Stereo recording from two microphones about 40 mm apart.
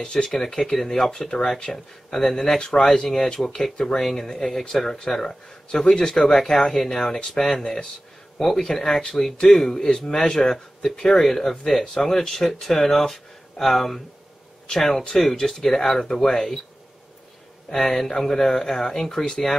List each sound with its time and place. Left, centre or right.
0.0 s speech: centre
10.5 s speech: centre
11.0 s speech: centre
11.2 s speech: centre
17.6 s speech: centre